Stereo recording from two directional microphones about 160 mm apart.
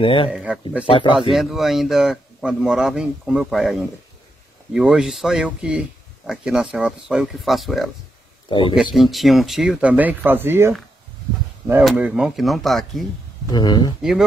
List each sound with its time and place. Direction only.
0.0 s speech: 30° left (ahead or behind)
0.3 s a man's voice: 5° right (ahead or behind)
0.8 s speech: 35° left (ahead or behind)
1.3 s a man's voice: centre (ahead or behind)
8.5 s speech: 30° left (ahead or behind)
8.9 s a man's voice: centre (ahead or behind)
11.8 s a man's voice: 5° right (ahead or behind)
13.5 s speech: 25° left (ahead or behind)